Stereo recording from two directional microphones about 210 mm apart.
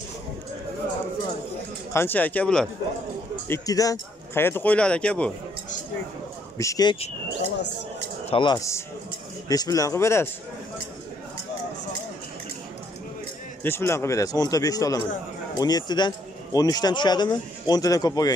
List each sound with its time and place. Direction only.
2.0 s speech: 10° left (ahead or behind)
6.6 s speech: 15° left (ahead or behind)
8.3 s speech: 20° left (ahead or behind)
13.6 s speech: 10° left (ahead or behind)